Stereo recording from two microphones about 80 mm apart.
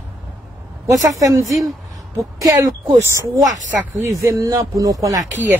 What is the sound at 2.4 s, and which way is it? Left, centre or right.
Speech, right.